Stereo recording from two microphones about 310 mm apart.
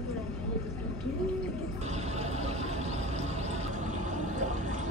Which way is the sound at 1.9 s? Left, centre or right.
Right.